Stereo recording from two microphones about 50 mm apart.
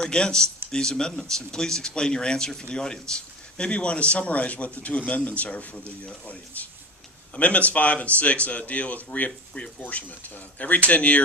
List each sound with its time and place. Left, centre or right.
0.0 s a man's voice: centre
7.3 s a man's voice: left